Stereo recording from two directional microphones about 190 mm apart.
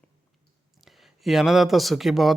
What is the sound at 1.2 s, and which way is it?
Speech, centre (ahead or behind).